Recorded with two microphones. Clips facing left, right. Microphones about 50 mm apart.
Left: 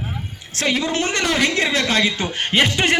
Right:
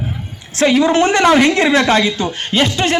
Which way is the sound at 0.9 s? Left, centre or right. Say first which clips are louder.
Right 9 dB; right.